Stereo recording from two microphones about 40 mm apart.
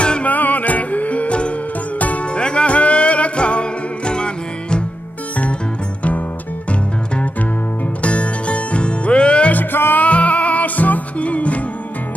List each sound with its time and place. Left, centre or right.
0.0 s music: left
0.3 s music: left
8.0 s music: left
9.5 s music: left